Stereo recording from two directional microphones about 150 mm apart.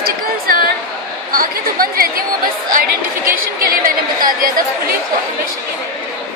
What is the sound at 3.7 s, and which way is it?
Speech, 70° right (ahead or behind).